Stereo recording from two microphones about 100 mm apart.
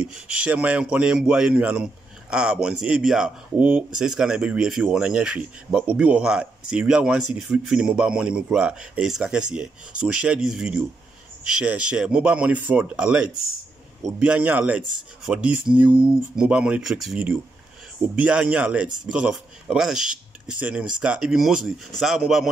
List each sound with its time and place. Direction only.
0.0 s speech: 10° right (ahead or behind)